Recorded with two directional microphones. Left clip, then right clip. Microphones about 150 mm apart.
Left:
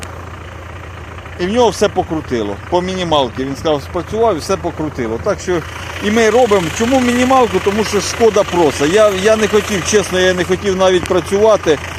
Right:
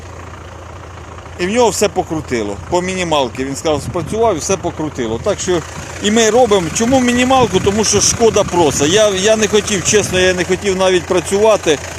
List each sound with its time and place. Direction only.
1.4 s speech: 35° right (ahead or behind); by 4.7 s 50° right (ahead or behind)
5.3 s speech: 65° right (ahead or behind); by 6.9 s 90° right
6.9 s speech: 40° right (ahead or behind)
7.5 s speech: 90° right; by 11.9 s 55° right (ahead or behind)